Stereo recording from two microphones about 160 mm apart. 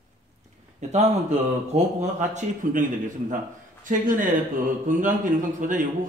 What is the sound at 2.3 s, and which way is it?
A man's voice, 50° right (ahead or behind).